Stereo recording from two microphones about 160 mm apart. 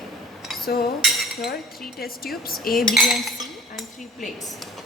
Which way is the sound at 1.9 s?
65° left (ahead or behind).